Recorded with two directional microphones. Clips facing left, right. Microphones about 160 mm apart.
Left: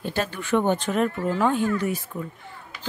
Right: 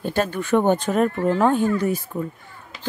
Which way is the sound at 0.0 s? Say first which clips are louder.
Right 5 dB; 45° right (ahead or behind).